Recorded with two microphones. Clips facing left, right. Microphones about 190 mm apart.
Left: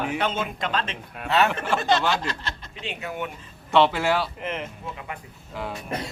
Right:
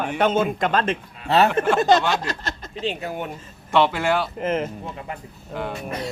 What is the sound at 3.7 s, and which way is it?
Speech, centre (ahead or behind).